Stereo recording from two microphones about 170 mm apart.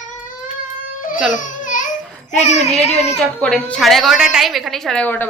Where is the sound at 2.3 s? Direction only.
40° left (ahead or behind).